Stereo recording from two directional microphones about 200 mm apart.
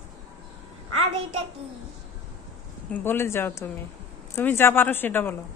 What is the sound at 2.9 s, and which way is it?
Speech, 10° left (ahead or behind).